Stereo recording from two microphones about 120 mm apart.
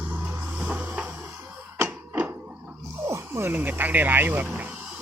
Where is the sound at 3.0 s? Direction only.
20° right (ahead or behind).